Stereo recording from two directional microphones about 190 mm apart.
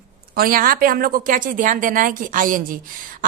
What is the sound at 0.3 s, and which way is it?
A woman's voice, 50° right (ahead or behind).